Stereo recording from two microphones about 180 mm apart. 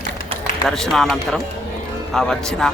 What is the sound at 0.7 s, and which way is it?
A man's voice, centre (ahead or behind).